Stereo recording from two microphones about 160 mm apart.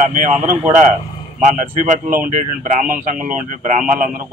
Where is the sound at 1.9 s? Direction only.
55° right (ahead or behind).